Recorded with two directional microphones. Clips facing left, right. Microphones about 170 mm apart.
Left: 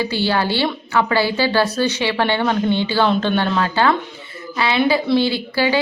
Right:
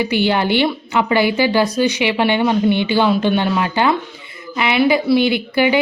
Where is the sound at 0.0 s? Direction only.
20° right (ahead or behind).